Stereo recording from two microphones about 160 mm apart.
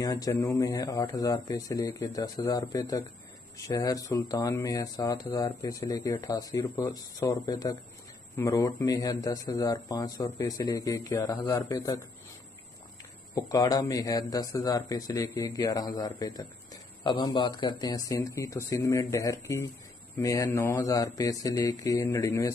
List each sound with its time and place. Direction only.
0.0 s speech: 20° left (ahead or behind)
13.3 s speech: 20° left (ahead or behind)